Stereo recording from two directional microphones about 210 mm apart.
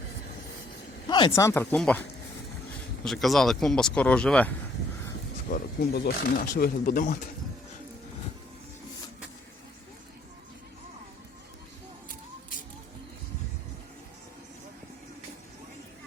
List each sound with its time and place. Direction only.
1.0 s speech: 20° left (ahead or behind)
3.0 s speech: centre (ahead or behind)
5.5 s speech: 45° left (ahead or behind)
12.0 s a sound: 40° left (ahead or behind)